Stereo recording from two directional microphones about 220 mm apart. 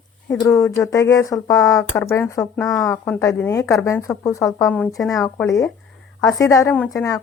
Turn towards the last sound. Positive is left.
turn(degrees=15)  # may be behind; listen again after turning